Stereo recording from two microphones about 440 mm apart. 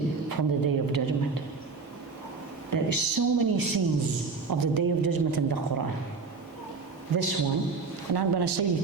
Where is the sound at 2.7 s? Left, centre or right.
Right.